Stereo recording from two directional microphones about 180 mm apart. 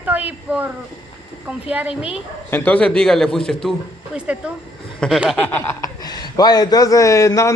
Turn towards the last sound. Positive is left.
turn(degrees=15)  # may be behind; listen again after turning